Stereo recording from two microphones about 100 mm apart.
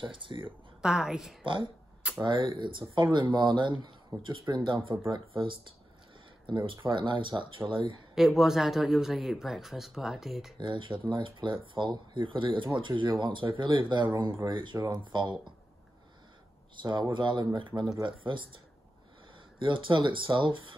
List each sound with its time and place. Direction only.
0.0 s speech: 55° right (ahead or behind)
0.8 s speech: 5° right (ahead or behind)
1.4 s speech: 55° right (ahead or behind)
8.1 s speech: centre (ahead or behind)
10.6 s speech: 55° right (ahead or behind)
16.8 s speech: 50° right (ahead or behind)
19.6 s speech: 55° right (ahead or behind)